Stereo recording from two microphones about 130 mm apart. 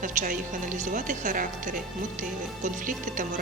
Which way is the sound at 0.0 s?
85° right.